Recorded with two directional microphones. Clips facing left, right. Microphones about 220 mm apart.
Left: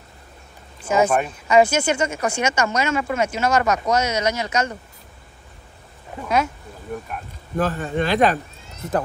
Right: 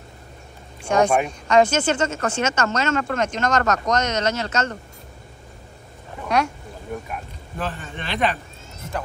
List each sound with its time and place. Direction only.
0.8 s speech: 5° left (ahead or behind)
6.2 s speech: centre (ahead or behind)
7.5 s speech: 45° left (ahead or behind)